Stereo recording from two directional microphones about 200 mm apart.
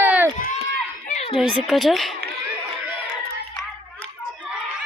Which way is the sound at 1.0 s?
35° left (ahead or behind).